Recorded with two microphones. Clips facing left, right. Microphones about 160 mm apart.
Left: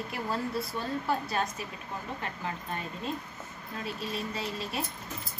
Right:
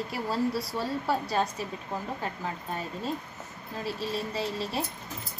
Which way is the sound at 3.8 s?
30° right (ahead or behind).